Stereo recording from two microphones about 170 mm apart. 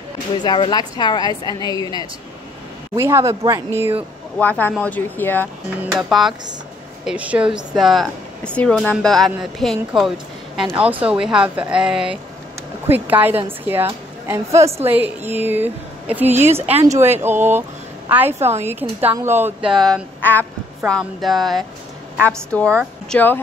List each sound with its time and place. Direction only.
0.4 s a woman's voice: 25° left (ahead or behind)
3.0 s a woman's voice: 15° right (ahead or behind)
4.4 s a woman's voice: 10° left (ahead or behind)
5.8 s a woman's voice: centre (ahead or behind)
19.7 s a woman's voice: 5° left (ahead or behind)